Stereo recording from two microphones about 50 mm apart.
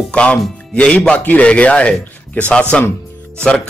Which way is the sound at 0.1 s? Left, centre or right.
Left.